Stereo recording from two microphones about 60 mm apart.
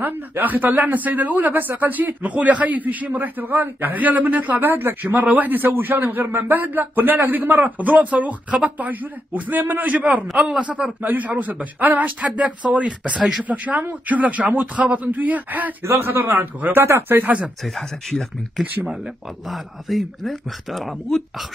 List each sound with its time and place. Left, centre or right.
0.0 s speech: right
5.0 s a man's voice: right
15.8 s a man's voice: right
17.6 s speech: centre